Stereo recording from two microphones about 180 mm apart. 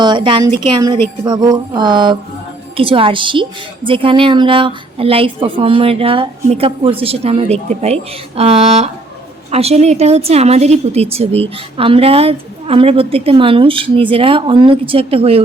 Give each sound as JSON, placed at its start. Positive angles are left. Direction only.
{"t": 0.0, "sound": "a woman's voice", "side_deg": -25}